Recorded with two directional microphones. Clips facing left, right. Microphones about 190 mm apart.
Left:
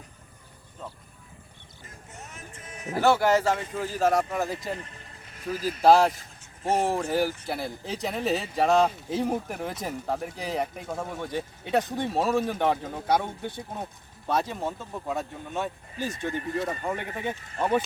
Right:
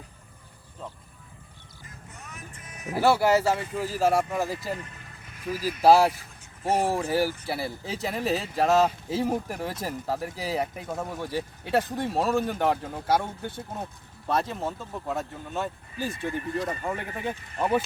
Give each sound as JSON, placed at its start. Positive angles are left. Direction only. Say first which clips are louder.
{"t": 2.1, "sound": "music", "louder": "left 1 dB", "side_deg": 25}
{"t": 2.9, "sound": "speech", "louder": "even", "side_deg": -10}